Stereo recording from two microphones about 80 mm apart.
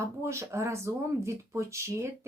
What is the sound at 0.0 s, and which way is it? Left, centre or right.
Speech, right.